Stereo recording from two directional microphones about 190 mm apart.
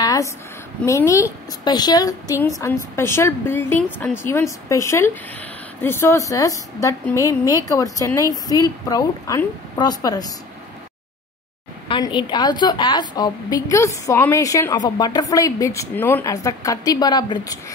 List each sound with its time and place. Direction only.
0.0 s a sound: 20° left (ahead or behind)
0.8 s a woman's voice: 15° left (ahead or behind)
11.9 s a woman's voice: 25° left (ahead or behind)